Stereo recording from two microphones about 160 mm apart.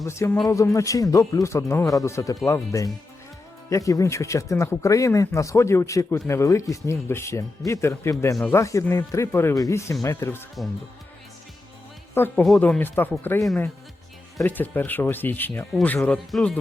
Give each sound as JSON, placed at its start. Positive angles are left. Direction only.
{"t": 0.0, "sound": "speech", "side_deg": 15}
{"t": 12.4, "sound": "speech", "side_deg": 5}
{"t": 14.4, "sound": "speech", "side_deg": 10}